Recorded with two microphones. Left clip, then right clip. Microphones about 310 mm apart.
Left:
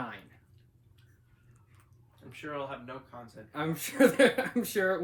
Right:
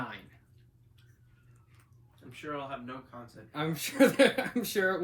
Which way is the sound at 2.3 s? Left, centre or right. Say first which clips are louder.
Even; left.